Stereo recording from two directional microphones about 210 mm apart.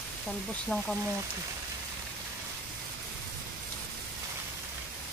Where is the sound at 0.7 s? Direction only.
5° left (ahead or behind).